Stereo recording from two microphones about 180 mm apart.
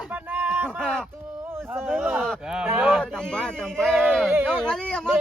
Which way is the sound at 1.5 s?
15° right (ahead or behind).